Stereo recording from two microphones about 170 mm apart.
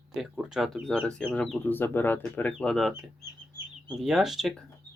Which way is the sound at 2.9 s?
15° right (ahead or behind).